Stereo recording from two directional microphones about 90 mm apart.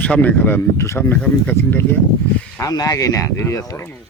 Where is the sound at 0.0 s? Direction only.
15° left (ahead or behind).